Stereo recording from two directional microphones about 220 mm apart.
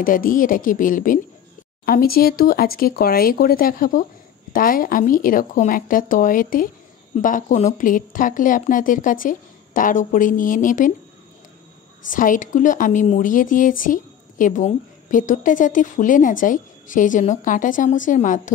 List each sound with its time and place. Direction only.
0.0 s speech: 40° left (ahead or behind)
12.1 s speech: 35° left (ahead or behind)